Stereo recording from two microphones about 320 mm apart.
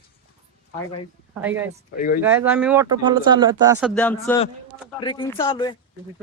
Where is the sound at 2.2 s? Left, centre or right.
Centre.